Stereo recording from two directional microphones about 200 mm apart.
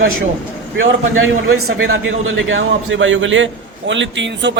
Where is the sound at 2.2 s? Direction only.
70° right (ahead or behind).